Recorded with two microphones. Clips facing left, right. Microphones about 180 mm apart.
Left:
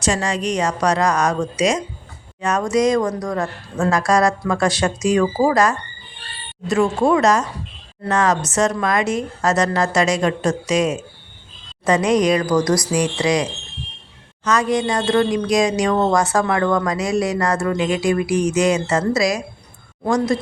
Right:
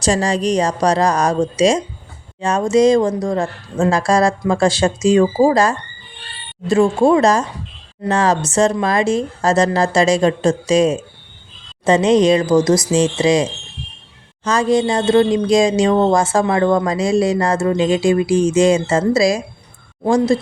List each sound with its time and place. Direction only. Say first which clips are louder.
0.0 s a woman's voice: right 4 dB; 35° right (ahead or behind)